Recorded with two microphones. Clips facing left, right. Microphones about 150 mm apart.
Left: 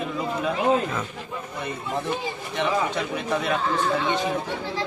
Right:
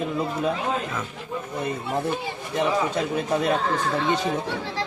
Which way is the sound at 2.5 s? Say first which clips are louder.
Right 2 dB; 40° right (ahead or behind).